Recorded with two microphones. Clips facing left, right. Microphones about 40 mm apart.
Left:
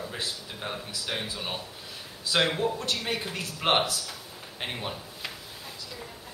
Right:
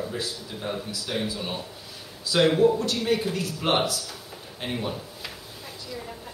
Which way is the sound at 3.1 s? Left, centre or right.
Centre.